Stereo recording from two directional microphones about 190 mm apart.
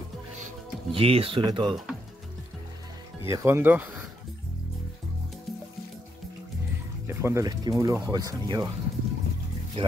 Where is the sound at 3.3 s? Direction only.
15° right (ahead or behind).